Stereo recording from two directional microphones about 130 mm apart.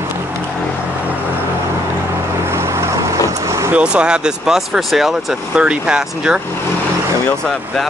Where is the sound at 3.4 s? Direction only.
25° right (ahead or behind).